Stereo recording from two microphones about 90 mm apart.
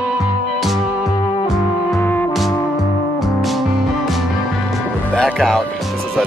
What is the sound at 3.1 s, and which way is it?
Music, centre (ahead or behind).